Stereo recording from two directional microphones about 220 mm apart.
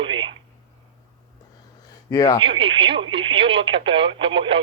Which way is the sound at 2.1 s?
15° left (ahead or behind).